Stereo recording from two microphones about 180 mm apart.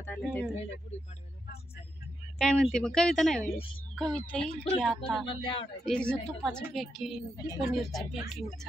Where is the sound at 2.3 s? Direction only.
5° left (ahead or behind).